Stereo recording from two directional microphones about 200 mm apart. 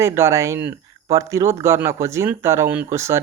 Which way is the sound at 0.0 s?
15° right (ahead or behind).